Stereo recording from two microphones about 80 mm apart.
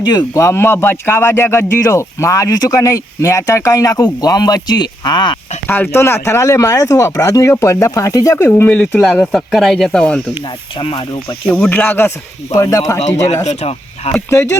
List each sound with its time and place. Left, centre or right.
0.0 s speech: left
0.3 s speech: left
4.0 s speech: left
5.6 s speech: left
8.4 s speech: left
9.1 s speech: centre
10.8 s speech: left
11.7 s speech: left
12.5 s speech: left